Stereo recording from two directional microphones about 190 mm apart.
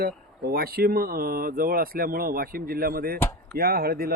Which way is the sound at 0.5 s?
55° right (ahead or behind).